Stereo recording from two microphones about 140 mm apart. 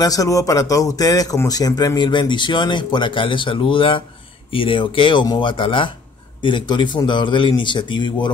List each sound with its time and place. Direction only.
0.0 s speech: 25° left (ahead or behind)